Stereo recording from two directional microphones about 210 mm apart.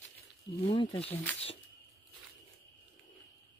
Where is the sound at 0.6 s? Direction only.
25° left (ahead or behind).